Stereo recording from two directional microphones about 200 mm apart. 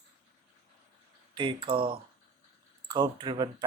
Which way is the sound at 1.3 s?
25° right (ahead or behind).